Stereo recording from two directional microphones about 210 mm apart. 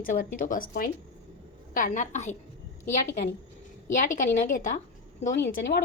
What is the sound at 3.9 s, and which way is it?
Speech, 35° left (ahead or behind).